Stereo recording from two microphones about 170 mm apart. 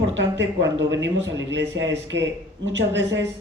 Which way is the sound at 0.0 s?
90° right.